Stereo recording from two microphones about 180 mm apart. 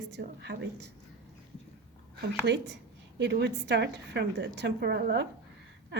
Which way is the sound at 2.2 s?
75° right (ahead or behind).